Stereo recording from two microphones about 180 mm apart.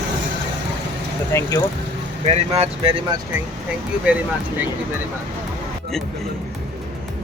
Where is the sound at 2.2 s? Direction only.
35° right (ahead or behind).